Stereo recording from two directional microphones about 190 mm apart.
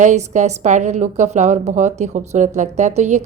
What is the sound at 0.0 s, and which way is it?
A woman's voice, 40° right (ahead or behind).